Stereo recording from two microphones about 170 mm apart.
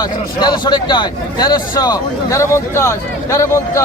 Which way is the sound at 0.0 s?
25° left (ahead or behind).